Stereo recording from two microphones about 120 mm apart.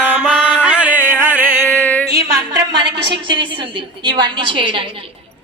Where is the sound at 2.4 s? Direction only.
40° right (ahead or behind).